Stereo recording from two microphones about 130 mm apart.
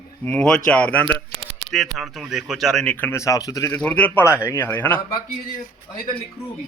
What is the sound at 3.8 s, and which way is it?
A man's voice, 10° left (ahead or behind).